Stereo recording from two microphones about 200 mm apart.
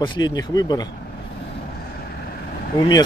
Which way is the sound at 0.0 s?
20° left (ahead or behind).